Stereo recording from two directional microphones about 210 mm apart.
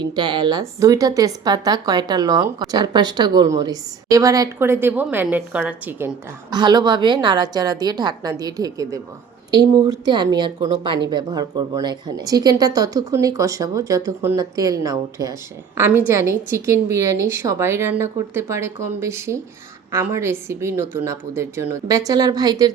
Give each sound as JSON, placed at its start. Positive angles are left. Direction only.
{"t": 0.2, "sound": "speech", "side_deg": -20}
{"t": 6.5, "sound": "a woman's voice", "side_deg": -20}